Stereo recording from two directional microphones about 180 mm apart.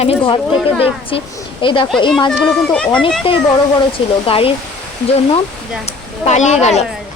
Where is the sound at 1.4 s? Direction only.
25° left (ahead or behind).